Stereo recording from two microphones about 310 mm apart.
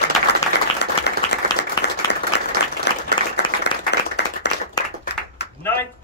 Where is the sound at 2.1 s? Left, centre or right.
Left.